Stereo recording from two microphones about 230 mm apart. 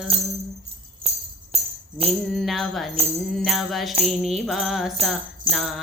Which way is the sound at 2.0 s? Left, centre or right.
Right.